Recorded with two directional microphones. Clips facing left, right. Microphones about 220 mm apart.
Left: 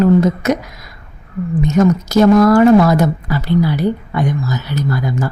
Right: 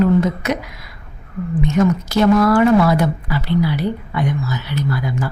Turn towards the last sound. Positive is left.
turn(degrees=45)  # may be behind; listen again after turning